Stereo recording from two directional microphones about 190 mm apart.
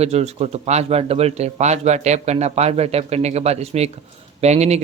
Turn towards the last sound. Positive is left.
turn(degrees=-35)  # may be behind; listen again after turning